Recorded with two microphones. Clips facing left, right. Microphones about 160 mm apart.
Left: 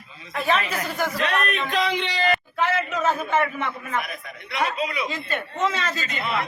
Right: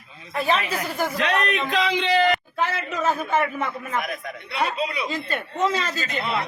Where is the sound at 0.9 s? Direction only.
30° right (ahead or behind).